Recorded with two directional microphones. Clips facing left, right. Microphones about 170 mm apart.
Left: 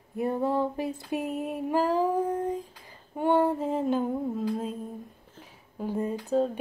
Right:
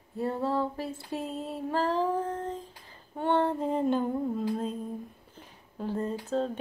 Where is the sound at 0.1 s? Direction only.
15° left (ahead or behind).